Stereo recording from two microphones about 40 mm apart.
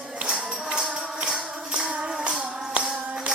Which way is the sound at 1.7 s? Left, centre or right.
Right.